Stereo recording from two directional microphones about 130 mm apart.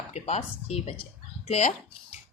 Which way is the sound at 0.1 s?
55° left (ahead or behind).